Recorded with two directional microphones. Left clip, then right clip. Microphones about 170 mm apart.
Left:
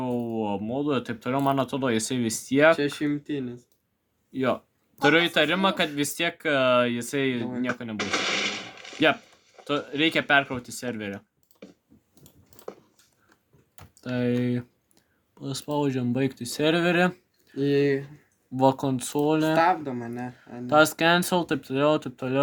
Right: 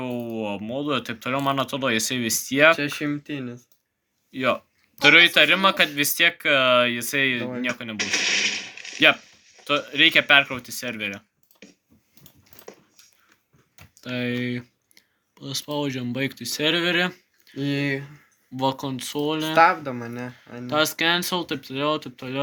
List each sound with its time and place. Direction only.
0.0 s speech: 30° left (ahead or behind)
2.7 s speech: 25° right (ahead or behind)
4.3 s speech: 30° left (ahead or behind)
14.0 s speech: 40° left (ahead or behind)
17.6 s speech: 25° right (ahead or behind)
18.5 s speech: 50° left (ahead or behind)
19.5 s speech: 20° right (ahead or behind)
20.7 s speech: 50° left (ahead or behind)